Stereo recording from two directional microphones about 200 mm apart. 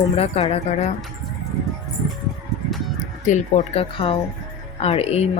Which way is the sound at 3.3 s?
35° left (ahead or behind).